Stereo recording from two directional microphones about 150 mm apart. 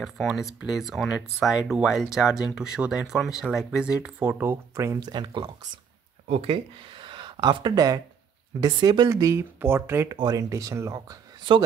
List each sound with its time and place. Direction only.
0.0 s speech: centre (ahead or behind)
5.0 s speech: 30° right (ahead or behind)
6.2 s speech: 40° right (ahead or behind); by 10.1 s 15° right (ahead or behind)
10.1 s speech: 25° right (ahead or behind)